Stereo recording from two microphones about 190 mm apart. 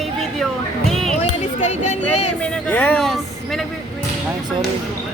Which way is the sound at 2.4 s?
5° left (ahead or behind).